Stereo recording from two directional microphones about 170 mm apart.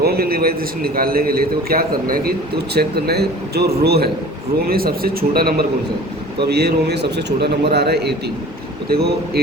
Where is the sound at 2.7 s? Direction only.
70° right (ahead or behind).